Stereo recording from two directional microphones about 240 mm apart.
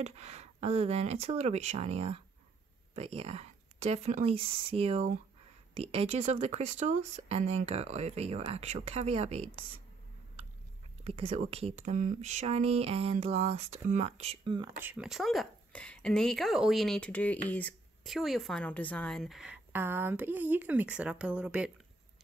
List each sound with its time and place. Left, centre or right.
0.0 s speech: right
11.1 s speech: right
14.8 s speech: centre